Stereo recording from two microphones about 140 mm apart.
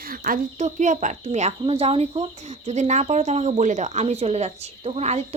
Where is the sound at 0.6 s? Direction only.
60° right (ahead or behind).